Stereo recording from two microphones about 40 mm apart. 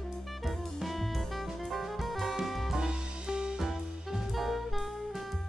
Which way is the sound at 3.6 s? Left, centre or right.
Centre.